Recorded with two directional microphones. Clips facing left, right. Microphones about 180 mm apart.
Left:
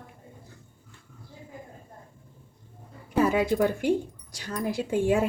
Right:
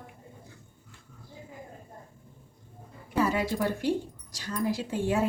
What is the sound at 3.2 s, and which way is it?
A woman's voice, 55° left (ahead or behind).